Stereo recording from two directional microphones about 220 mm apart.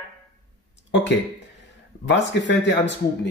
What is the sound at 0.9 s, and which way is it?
Speech, 50° left (ahead or behind).